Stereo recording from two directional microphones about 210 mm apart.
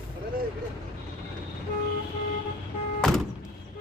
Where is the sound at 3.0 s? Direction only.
Centre (ahead or behind).